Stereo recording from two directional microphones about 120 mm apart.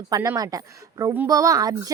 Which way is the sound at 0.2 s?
25° right (ahead or behind).